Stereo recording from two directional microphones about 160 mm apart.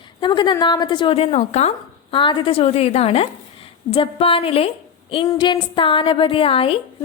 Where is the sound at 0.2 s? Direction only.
30° left (ahead or behind).